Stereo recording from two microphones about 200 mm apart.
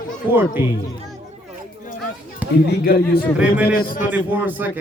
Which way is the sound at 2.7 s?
50° left (ahead or behind).